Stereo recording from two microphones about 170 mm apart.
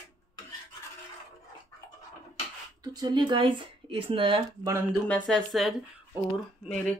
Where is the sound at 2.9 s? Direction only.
25° right (ahead or behind).